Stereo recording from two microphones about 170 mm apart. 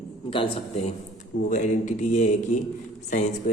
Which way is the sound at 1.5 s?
45° left (ahead or behind).